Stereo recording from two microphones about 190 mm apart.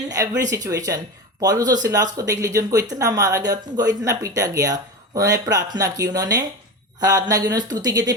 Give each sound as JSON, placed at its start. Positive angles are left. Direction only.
{"t": 0.1, "sound": "speech", "side_deg": -20}